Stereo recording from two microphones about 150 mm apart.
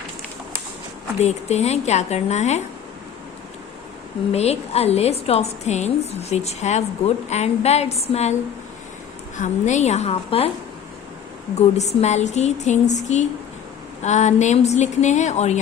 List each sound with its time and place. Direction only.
1.2 s a woman's voice: 45° left (ahead or behind)
4.3 s a woman's voice: 45° left (ahead or behind)
9.4 s a woman's voice: 50° left (ahead or behind)
11.5 s a woman's voice: 50° left (ahead or behind)